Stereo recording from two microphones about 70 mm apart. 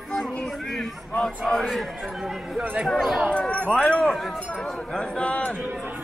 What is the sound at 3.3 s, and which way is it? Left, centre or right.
Speech, centre.